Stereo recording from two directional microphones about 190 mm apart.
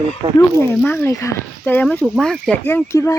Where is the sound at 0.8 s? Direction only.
10° left (ahead or behind).